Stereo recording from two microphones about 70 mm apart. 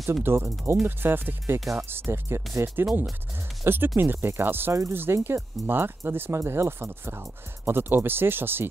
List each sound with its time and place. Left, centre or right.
0.1 s speech: right